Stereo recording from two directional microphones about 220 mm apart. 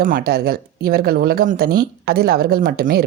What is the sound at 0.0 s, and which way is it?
Speech, 40° right (ahead or behind).